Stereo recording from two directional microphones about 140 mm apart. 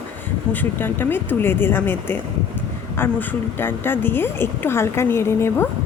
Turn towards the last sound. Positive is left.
turn(degrees=20)  # may be behind; listen again after turning